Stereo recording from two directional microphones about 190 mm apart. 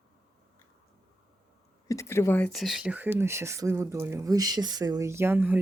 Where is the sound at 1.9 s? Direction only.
15° left (ahead or behind).